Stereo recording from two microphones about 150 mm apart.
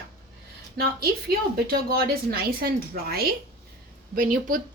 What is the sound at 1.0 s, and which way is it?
A woman's voice, 90° right.